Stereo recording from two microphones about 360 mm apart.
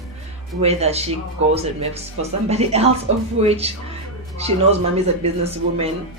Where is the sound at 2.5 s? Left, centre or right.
Centre.